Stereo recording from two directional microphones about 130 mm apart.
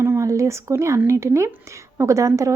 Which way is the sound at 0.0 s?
20° right (ahead or behind).